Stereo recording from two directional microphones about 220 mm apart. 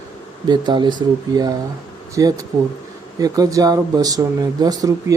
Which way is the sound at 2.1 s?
15° right (ahead or behind).